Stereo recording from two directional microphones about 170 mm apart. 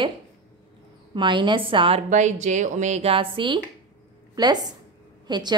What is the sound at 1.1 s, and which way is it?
Speech, 25° right (ahead or behind).